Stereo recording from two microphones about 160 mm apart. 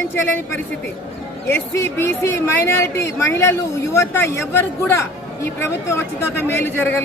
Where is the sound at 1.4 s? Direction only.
15° left (ahead or behind).